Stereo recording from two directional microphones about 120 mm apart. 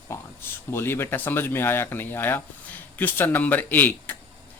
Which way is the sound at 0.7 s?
20° left (ahead or behind).